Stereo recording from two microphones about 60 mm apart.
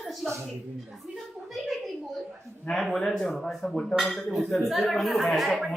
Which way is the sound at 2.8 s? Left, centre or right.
Centre.